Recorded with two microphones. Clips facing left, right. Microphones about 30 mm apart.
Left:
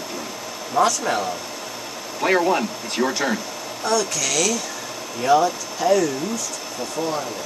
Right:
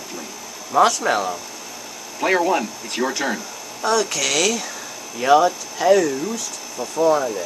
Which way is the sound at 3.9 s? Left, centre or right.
Centre.